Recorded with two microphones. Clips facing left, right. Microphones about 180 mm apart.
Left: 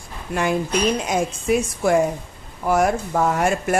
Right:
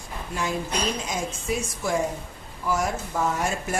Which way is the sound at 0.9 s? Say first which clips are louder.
Left 8 dB; 60° left (ahead or behind).